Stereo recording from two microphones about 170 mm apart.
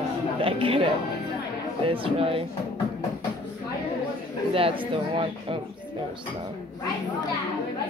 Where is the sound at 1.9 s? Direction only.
30° right (ahead or behind).